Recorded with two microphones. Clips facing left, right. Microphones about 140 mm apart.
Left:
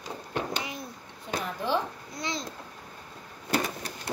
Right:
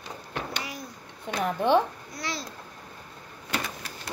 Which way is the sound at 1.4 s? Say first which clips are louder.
Right 8 dB; 60° right (ahead or behind).